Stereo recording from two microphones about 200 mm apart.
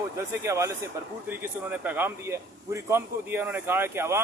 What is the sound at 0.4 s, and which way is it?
A man's voice, 15° right (ahead or behind).